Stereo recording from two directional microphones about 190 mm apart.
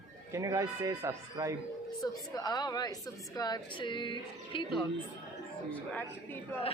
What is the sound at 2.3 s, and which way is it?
Speech, 20° left (ahead or behind).